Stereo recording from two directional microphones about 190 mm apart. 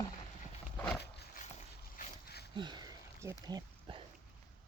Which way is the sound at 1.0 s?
60° left (ahead or behind).